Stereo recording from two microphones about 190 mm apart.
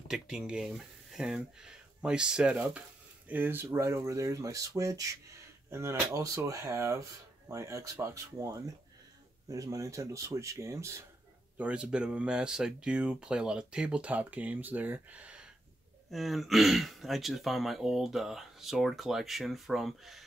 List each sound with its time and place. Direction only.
0.1 s speech: 5° right (ahead or behind)